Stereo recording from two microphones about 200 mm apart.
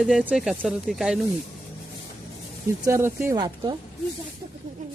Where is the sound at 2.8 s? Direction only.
15° right (ahead or behind).